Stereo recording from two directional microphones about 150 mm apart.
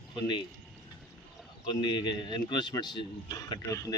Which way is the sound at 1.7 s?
30° left (ahead or behind).